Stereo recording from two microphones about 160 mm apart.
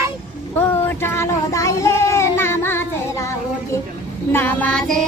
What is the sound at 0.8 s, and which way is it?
Child singing, 15° left (ahead or behind).